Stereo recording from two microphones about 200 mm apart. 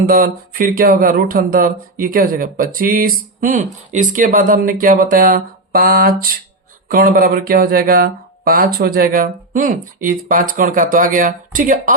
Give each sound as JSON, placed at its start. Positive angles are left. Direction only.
{"t": 0.0, "sound": "speech", "side_deg": -45}